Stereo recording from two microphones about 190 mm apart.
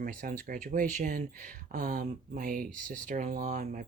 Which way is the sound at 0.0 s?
45° right (ahead or behind).